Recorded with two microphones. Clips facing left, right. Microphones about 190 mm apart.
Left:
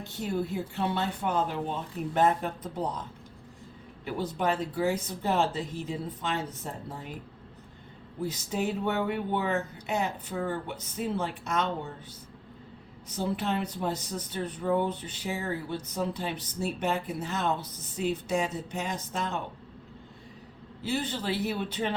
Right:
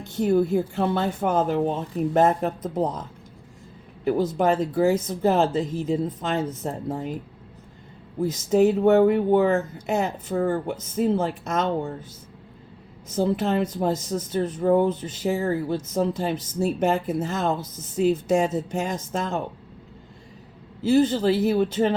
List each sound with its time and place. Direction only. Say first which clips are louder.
0.0 s speech: right 11 dB; 50° right (ahead or behind)
4.0 s speech: right 8 dB; 45° right (ahead or behind)
8.2 s speech: right 12 dB; 45° right (ahead or behind)
13.1 s speech: right 7 dB; 45° right (ahead or behind)
20.8 s speech: right 12 dB; 45° right (ahead or behind)